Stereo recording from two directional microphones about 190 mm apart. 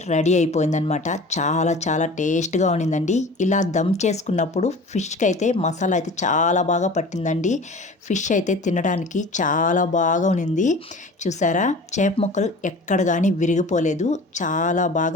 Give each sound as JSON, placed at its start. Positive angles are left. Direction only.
{"t": 0.1, "sound": "a woman's voice", "side_deg": 40}